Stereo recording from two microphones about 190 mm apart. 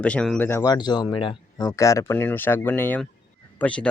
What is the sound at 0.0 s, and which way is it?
Speech, 5° left (ahead or behind).